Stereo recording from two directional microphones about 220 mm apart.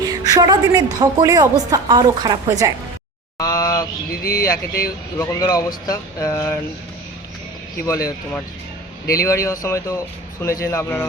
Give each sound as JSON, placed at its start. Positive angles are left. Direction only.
{"t": 0.0, "sound": "a sound", "side_deg": -15}
{"t": 0.9, "sound": "a woman's voice", "side_deg": -15}
{"t": 3.3, "sound": "speech", "side_deg": 15}
{"t": 7.9, "sound": "speech", "side_deg": 15}